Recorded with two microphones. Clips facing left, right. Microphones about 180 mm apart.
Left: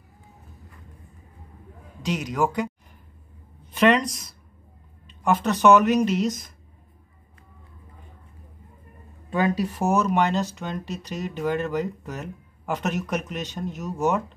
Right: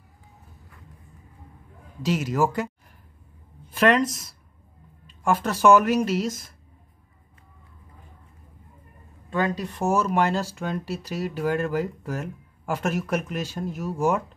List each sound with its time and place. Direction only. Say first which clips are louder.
2.0 s speech: right 2 dB; 5° right (ahead or behind)
3.7 s speech: left 1 dB; centre (ahead or behind)
9.3 s speech: left 2 dB; 10° left (ahead or behind)
9.9 s speech: left 1 dB; 5° right (ahead or behind)